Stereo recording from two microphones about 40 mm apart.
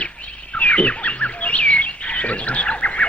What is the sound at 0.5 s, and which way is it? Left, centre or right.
Fowl, left.